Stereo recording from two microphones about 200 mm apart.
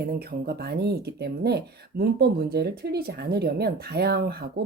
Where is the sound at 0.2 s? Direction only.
50° right (ahead or behind).